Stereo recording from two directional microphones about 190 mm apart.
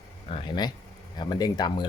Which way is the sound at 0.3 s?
25° left (ahead or behind).